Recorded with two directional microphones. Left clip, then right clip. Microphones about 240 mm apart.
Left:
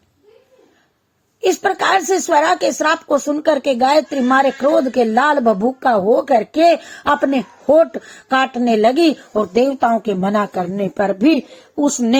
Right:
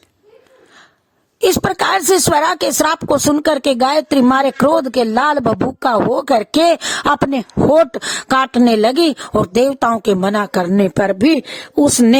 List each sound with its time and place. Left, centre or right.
1.4 s speech: right